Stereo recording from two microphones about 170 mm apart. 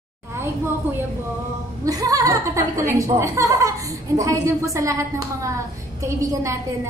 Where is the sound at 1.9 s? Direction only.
20° right (ahead or behind).